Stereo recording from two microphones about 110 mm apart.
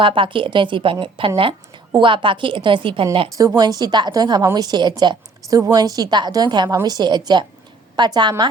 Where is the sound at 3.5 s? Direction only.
35° right (ahead or behind).